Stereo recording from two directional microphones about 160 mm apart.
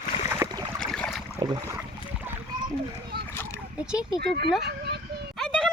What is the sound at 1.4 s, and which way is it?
Boat, 30° right (ahead or behind).